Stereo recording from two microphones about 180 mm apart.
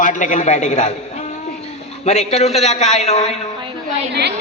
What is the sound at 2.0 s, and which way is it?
A man's voice, 40° left (ahead or behind).